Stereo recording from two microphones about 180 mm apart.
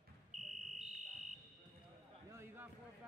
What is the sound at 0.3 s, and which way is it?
Fire alarm, 45° right (ahead or behind).